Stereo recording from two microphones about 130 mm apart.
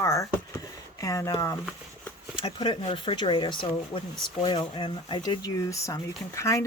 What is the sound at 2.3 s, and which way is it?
Speech, 40° left (ahead or behind).